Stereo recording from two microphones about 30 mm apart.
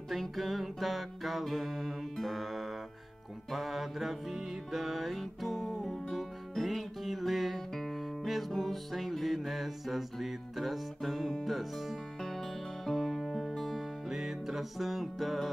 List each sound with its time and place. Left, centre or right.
0.1 s music: centre
7.9 s guitar: centre
8.5 s music: centre
12.2 s music: centre
14.0 s music: centre